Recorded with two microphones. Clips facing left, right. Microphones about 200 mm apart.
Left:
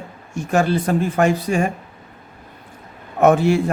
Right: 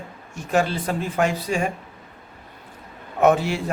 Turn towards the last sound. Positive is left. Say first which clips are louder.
# left 4 dB
turn(degrees=50)  # may be behind; listen again after turning